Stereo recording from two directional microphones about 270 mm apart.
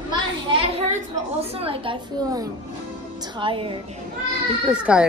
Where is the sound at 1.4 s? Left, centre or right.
Right.